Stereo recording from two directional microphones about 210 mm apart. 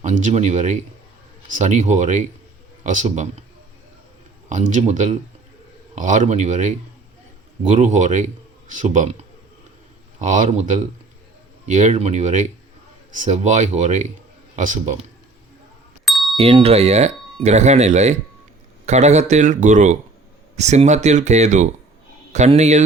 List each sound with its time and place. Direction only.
0.0 s speech: 35° right (ahead or behind)
4.4 s speech: 35° right (ahead or behind)
16.0 s a sound: centre (ahead or behind)
16.4 s speech: 25° right (ahead or behind)